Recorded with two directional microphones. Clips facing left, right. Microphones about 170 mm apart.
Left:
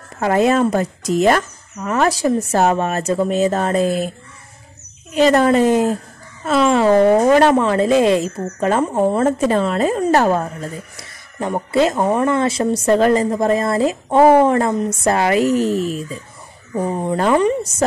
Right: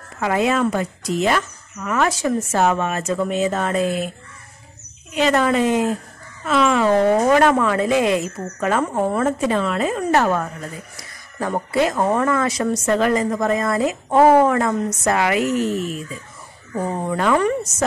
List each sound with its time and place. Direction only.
0.2 s speech: 40° left (ahead or behind)
5.1 s a woman's voice: 40° left (ahead or behind); by 9.2 s 20° left (ahead or behind)
9.2 s a woman's voice: 35° left (ahead or behind)
12.0 s speech: 15° left (ahead or behind)
12.3 s speech: 25° left (ahead or behind)
16.7 s a woman's voice: 20° left (ahead or behind)